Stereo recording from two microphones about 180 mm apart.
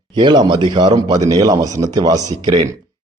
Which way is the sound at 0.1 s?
25° right (ahead or behind).